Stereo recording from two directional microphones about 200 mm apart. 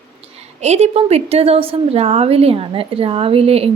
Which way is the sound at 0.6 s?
35° right (ahead or behind).